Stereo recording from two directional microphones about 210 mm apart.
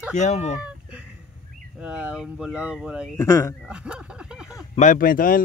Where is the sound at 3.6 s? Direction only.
5° right (ahead or behind).